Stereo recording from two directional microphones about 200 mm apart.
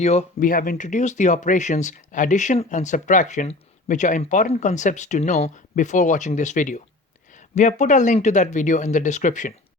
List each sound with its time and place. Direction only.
0.0 s speech: 35° left (ahead or behind)